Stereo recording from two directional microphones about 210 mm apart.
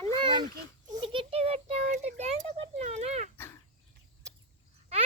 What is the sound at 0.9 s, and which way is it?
A child's voice, 20° right (ahead or behind).